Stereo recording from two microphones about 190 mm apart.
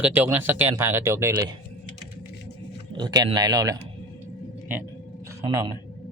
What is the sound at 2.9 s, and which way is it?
Speech, 20° right (ahead or behind).